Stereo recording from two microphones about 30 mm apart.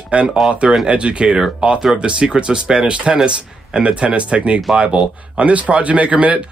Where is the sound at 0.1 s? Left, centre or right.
Right.